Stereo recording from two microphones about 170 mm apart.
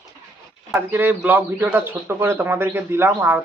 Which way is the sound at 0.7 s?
10° right (ahead or behind).